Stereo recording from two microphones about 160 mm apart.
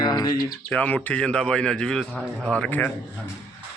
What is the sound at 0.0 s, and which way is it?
Bird, 25° left (ahead or behind).